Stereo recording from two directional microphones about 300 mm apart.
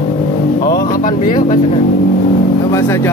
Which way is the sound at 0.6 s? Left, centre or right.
Left.